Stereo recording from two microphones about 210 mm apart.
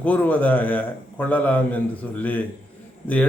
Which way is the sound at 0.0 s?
5° left (ahead or behind).